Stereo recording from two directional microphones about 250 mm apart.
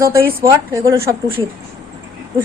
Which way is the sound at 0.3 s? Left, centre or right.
Centre.